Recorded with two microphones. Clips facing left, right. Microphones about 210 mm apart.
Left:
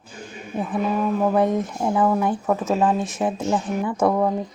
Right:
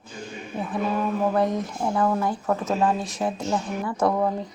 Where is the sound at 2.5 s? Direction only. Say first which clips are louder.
Left 2 dB; 5° left (ahead or behind).